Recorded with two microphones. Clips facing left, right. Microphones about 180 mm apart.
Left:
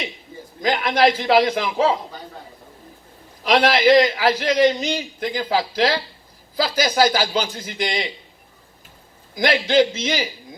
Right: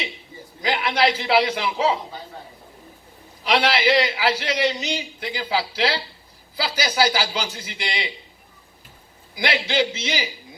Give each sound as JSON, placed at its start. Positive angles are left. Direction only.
{"t": 0.6, "sound": "a man's voice", "side_deg": 45}
{"t": 3.4, "sound": "a man's voice", "side_deg": 45}
{"t": 7.4, "sound": "speech", "side_deg": -10}
{"t": 7.7, "sound": "a man's voice", "side_deg": 45}
{"t": 9.4, "sound": "a man's voice", "side_deg": 50}